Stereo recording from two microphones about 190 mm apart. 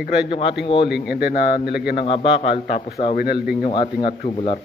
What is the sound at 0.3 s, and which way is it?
Speech, 30° left (ahead or behind).